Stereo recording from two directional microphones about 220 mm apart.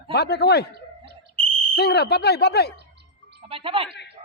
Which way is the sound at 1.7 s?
45° left (ahead or behind).